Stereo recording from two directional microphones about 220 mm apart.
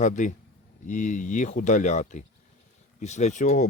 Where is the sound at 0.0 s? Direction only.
35° left (ahead or behind).